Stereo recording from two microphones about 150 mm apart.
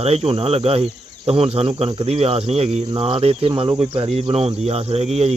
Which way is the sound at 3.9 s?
40° right (ahead or behind).